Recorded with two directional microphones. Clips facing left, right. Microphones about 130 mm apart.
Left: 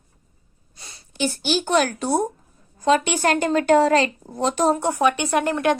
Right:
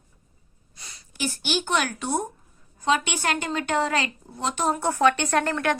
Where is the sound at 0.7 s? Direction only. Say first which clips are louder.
Left 2 dB; 30° left (ahead or behind).